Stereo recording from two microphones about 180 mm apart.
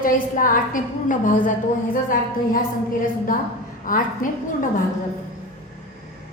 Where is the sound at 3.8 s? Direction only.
50° left (ahead or behind).